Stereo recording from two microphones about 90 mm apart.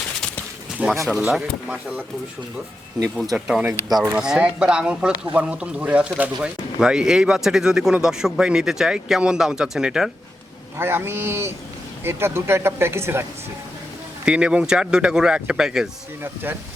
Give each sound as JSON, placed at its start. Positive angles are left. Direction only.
{"t": 0.8, "sound": "speech", "side_deg": -15}
{"t": 3.3, "sound": "speech", "side_deg": -5}
{"t": 10.8, "sound": "speech", "side_deg": -25}
{"t": 14.3, "sound": "speech", "side_deg": -10}
{"t": 16.2, "sound": "speech", "side_deg": -25}